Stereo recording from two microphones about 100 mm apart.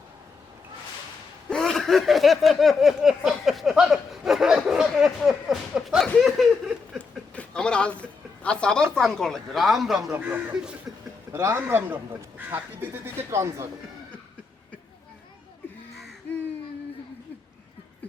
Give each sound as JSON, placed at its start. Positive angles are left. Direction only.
{"t": 1.5, "sound": "a sound", "side_deg": 5}
{"t": 7.3, "sound": "speech", "side_deg": 10}
{"t": 10.1, "sound": "speech", "side_deg": -15}
{"t": 11.3, "sound": "speech", "side_deg": -30}